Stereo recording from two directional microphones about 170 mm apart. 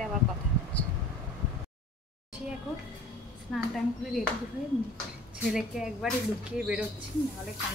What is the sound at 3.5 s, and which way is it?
Speech, centre (ahead or behind).